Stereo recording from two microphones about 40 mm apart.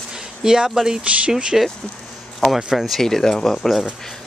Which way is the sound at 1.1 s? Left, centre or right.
Right.